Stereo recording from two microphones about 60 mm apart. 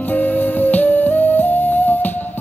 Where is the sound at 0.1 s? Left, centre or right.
Left.